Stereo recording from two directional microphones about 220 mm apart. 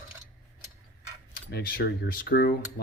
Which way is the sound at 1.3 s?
45° left (ahead or behind).